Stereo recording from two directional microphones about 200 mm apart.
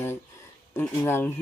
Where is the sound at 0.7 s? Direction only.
10° left (ahead or behind).